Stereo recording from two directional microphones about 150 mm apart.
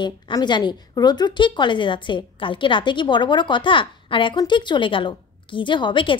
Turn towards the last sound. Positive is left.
turn(degrees=35)  # may be behind; listen again after turning